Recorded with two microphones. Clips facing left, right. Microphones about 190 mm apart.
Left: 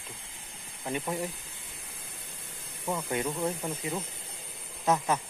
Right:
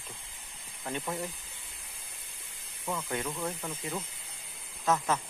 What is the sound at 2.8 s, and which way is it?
Speech, 20° left (ahead or behind).